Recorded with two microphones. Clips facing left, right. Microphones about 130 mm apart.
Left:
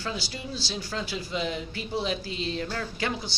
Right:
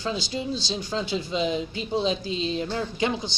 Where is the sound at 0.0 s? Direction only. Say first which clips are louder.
Right 6 dB; 20° right (ahead or behind).